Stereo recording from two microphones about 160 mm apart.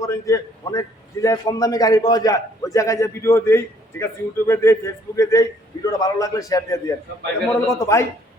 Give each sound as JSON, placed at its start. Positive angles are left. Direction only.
{"t": 0.0, "sound": "a man's voice", "side_deg": 20}